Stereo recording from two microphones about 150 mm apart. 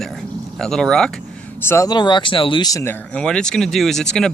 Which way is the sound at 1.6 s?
20° left (ahead or behind).